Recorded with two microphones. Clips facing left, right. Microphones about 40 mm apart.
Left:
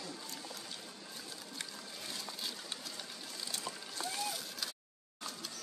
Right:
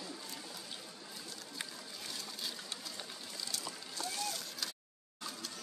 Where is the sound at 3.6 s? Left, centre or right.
Centre.